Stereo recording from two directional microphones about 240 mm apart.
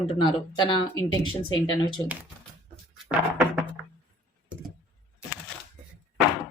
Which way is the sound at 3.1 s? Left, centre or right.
Centre.